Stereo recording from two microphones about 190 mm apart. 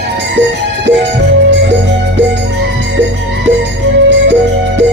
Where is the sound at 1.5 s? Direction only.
70° right (ahead or behind).